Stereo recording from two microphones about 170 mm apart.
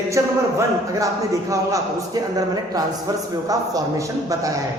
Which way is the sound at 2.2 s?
20° right (ahead or behind).